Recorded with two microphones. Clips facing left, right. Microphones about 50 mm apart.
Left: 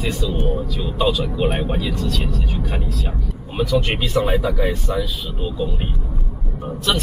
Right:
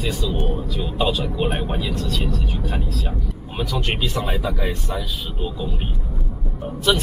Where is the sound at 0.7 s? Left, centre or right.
Centre.